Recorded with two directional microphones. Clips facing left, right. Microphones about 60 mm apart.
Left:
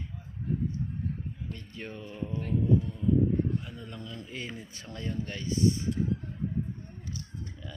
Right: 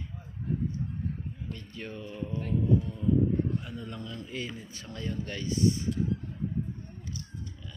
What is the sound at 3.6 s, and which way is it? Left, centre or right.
Speech, centre.